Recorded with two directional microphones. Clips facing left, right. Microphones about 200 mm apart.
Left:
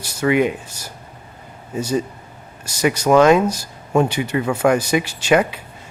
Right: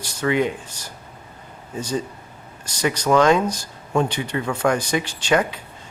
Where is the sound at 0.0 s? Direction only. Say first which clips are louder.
Left 4 dB; 10° left (ahead or behind).